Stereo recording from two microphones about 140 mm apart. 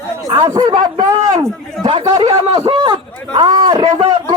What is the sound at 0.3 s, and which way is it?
Speech, 25° right (ahead or behind).